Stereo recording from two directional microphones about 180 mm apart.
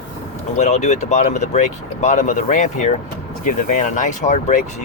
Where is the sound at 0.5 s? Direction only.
40° left (ahead or behind).